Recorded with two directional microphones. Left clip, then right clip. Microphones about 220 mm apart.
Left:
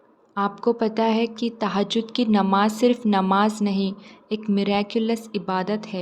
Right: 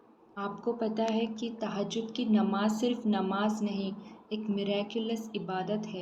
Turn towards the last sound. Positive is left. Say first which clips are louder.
# left 9 dB
turn(degrees=50)  # may be behind; listen again after turning